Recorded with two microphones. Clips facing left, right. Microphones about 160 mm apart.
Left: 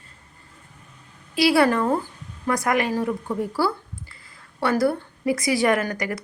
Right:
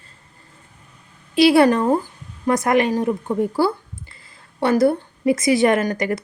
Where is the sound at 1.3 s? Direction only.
25° right (ahead or behind).